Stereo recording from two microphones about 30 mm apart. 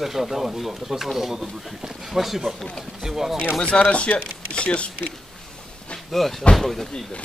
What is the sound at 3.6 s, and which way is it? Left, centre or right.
Speech, left.